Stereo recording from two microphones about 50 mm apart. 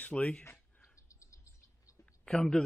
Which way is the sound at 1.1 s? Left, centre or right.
Left.